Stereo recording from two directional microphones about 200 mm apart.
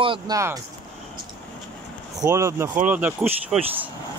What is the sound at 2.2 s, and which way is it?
Speech, 15° right (ahead or behind).